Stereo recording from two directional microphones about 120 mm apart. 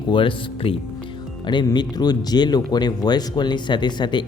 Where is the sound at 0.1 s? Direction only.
45° left (ahead or behind).